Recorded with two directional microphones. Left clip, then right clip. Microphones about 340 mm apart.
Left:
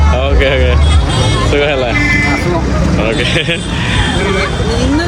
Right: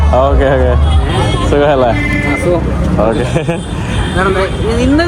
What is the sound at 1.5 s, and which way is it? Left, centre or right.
Speech, centre.